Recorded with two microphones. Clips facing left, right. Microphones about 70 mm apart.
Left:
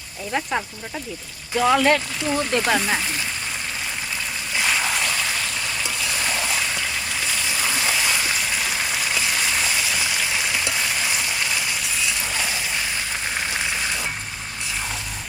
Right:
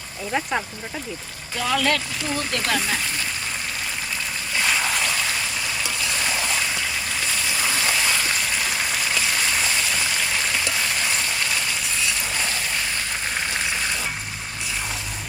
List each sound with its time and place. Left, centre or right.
0.3 s speech: centre
1.5 s speech: left
4.5 s a sound: centre